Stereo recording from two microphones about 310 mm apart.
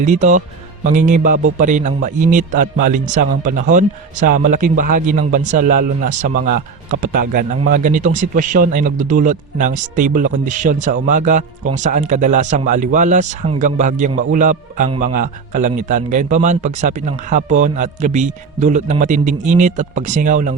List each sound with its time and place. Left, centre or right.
0.0 s speech: right